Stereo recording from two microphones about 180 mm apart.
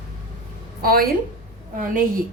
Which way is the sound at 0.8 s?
55° right (ahead or behind).